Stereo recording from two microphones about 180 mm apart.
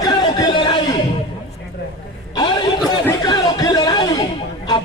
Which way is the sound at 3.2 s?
20° left (ahead or behind).